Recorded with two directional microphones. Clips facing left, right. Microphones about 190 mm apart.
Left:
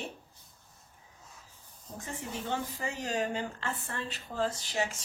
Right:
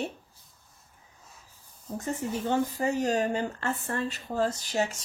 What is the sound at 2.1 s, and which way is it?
Speech, 45° right (ahead or behind).